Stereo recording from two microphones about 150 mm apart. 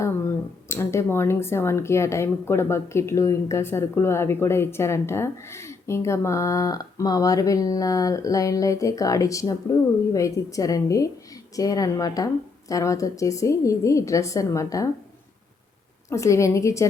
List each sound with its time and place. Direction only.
0.7 s speech: 20° left (ahead or behind)
16.0 s speech: 20° left (ahead or behind)